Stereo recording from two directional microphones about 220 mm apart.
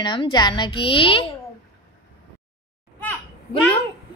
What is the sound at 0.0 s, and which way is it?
A child's voice, 20° left (ahead or behind).